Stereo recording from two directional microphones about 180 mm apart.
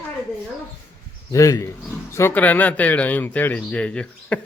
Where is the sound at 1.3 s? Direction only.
15° left (ahead or behind).